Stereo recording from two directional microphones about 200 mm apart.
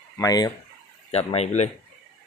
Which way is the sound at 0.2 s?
20° left (ahead or behind).